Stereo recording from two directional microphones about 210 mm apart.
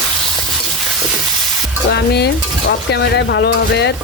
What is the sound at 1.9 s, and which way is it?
Speech, 50° left (ahead or behind).